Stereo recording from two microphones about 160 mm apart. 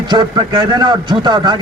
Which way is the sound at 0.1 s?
30° right (ahead or behind).